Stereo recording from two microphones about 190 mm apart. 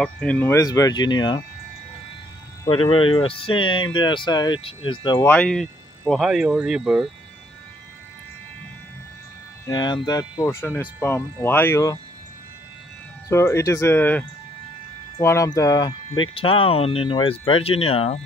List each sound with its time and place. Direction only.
0.0 s speech: 5° left (ahead or behind); by 1.4 s 25° left (ahead or behind)
2.7 s speech: 30° left (ahead or behind)
5.2 s speech: 10° left (ahead or behind)
9.7 s speech: 20° left (ahead or behind)
13.3 s speech: 15° left (ahead or behind); by 18.2 s 30° left (ahead or behind)